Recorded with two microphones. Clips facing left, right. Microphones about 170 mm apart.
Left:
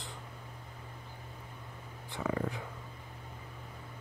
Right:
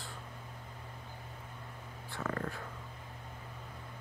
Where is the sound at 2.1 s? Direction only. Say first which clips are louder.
Left 3 dB; 15° left (ahead or behind).